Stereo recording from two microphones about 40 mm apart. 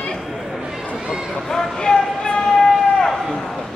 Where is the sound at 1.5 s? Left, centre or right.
Centre.